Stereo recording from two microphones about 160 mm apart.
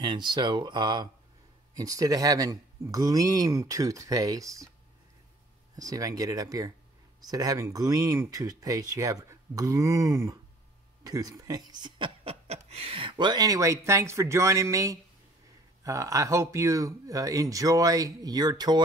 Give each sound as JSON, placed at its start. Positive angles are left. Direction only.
{"t": 0.0, "sound": "speech", "side_deg": -30}
{"t": 5.8, "sound": "speech", "side_deg": -20}